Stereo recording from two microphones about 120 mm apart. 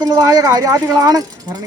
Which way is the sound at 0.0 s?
30° right (ahead or behind).